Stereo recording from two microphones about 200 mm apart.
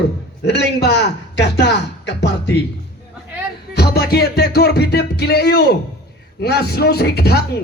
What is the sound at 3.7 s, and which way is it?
Music, 55° left (ahead or behind).